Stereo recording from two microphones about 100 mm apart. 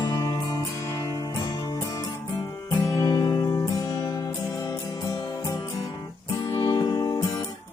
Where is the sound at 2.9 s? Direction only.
35° left (ahead or behind).